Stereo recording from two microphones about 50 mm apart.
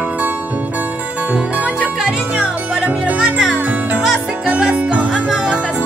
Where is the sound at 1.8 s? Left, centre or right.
Centre.